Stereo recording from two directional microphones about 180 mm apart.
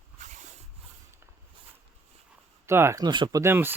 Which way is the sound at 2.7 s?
15° right (ahead or behind).